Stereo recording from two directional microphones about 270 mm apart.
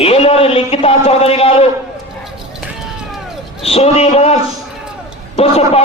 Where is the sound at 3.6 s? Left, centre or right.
Left.